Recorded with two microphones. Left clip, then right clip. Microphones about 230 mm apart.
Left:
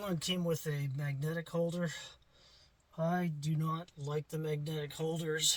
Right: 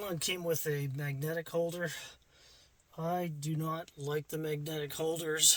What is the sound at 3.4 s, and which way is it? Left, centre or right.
Speech, right.